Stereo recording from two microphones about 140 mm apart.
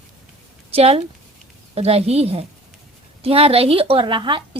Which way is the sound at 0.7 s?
45° right (ahead or behind).